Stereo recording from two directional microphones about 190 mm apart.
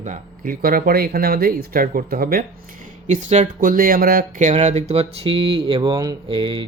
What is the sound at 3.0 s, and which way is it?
Speech, 35° right (ahead or behind).